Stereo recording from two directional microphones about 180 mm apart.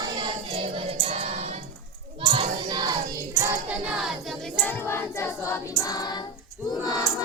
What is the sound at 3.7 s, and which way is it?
Choir, 5° right (ahead or behind).